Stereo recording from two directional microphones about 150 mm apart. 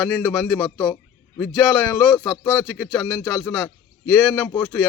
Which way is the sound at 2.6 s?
5° right (ahead or behind).